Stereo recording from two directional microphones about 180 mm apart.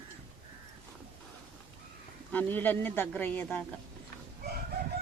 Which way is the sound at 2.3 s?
10° left (ahead or behind).